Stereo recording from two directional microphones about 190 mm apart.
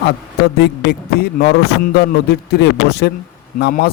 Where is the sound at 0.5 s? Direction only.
60° left (ahead or behind).